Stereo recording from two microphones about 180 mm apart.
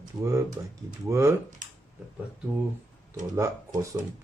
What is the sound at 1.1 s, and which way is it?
Speech, 15° right (ahead or behind).